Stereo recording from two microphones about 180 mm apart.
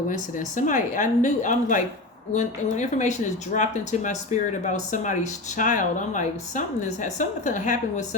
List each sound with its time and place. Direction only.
0.1 s a woman's voice: 45° left (ahead or behind)